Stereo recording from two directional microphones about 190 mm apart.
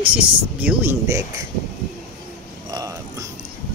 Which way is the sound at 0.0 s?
5° right (ahead or behind).